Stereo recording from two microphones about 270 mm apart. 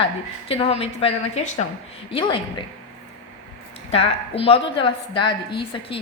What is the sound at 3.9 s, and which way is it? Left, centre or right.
A woman's voice, left.